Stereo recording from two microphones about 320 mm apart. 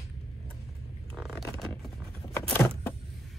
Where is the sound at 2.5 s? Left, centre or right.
Centre.